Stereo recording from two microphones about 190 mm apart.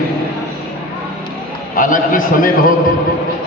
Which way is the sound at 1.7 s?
45° left (ahead or behind).